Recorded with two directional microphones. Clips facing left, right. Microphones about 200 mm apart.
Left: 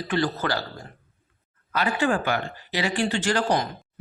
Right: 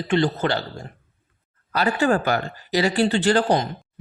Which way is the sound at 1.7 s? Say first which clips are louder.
Right 4 dB; 40° right (ahead or behind).